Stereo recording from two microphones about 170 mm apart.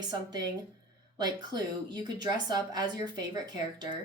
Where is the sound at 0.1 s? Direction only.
25° right (ahead or behind).